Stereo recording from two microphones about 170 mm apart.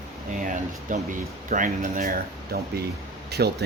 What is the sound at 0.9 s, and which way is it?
Speech, 50° right (ahead or behind).